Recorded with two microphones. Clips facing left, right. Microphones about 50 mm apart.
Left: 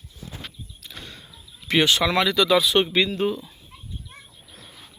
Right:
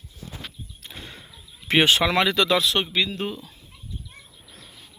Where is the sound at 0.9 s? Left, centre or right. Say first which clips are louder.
Even; centre.